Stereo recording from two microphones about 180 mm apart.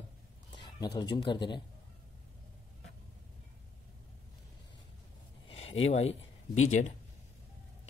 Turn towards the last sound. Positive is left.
turn(degrees=40)  # may be behind; listen again after turning